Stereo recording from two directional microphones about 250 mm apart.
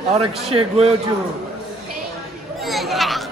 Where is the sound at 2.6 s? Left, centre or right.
Centre.